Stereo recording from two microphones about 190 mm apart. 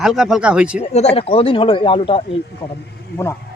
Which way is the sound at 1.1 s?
30° left (ahead or behind).